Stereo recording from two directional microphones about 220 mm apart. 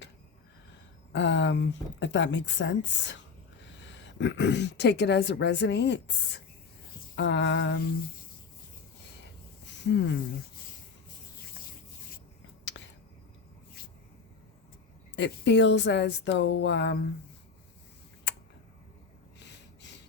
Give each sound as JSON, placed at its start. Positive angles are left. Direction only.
{"t": 1.1, "sound": "a woman's voice", "side_deg": 55}
{"t": 7.2, "sound": "speech", "side_deg": 55}
{"t": 9.8, "sound": "speech", "side_deg": 55}
{"t": 12.6, "sound": "a sound", "side_deg": 55}
{"t": 15.1, "sound": "a woman's voice", "side_deg": 55}